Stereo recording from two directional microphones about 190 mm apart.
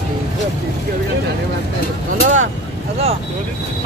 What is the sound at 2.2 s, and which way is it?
Speech, 40° right (ahead or behind).